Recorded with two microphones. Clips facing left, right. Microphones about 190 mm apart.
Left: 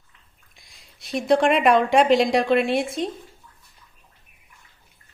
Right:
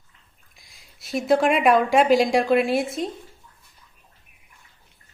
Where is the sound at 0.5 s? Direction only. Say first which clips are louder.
Left 1 dB; centre (ahead or behind).